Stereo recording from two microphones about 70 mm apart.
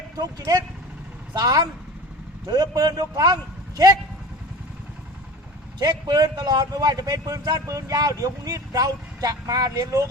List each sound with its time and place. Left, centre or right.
0.2 s speech: right
5.8 s a man's voice: right
7.7 s speech: right